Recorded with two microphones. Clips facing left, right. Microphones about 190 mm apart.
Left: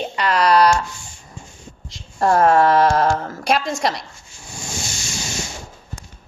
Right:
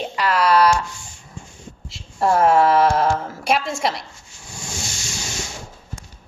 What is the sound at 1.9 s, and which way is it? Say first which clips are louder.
A woman's voice: left 1 dB; 5° right (ahead or behind).